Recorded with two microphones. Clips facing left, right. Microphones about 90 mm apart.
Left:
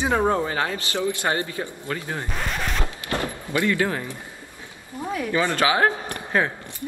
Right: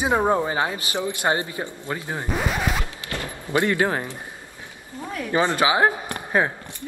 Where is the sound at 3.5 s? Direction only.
25° right (ahead or behind).